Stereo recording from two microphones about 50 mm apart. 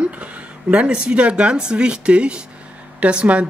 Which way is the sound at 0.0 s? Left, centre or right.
Right.